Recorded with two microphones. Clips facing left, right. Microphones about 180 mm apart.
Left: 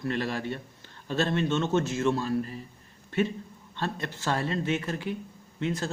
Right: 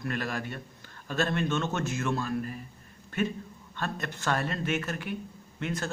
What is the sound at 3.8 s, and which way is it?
A man's voice, 25° left (ahead or behind).